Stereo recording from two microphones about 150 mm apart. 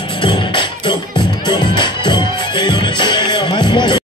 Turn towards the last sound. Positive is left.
turn(degrees=30)  # may be behind; listen again after turning